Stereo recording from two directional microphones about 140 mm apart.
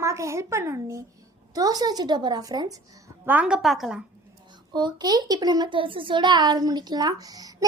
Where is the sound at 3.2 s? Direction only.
10° right (ahead or behind).